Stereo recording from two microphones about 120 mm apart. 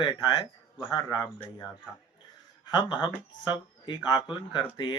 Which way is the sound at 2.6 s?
40° left (ahead or behind).